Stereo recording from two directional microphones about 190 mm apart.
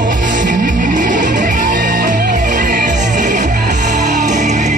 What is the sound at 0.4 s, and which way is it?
Music, 45° right (ahead or behind).